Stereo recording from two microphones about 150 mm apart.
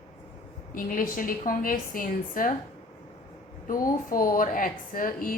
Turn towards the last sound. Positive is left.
turn(degrees=70)  # may be behind; listen again after turning